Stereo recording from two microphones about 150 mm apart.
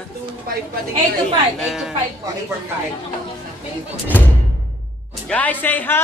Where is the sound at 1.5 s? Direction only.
Centre (ahead or behind).